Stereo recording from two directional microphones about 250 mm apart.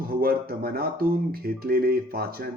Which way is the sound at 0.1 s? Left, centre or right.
Right.